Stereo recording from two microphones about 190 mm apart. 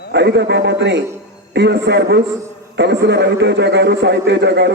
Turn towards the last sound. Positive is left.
turn(degrees=-65)  # may be behind; listen again after turning